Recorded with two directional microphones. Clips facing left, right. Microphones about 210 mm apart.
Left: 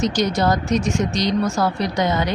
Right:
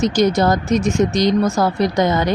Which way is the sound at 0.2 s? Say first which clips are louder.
Right 4 dB; 45° right (ahead or behind).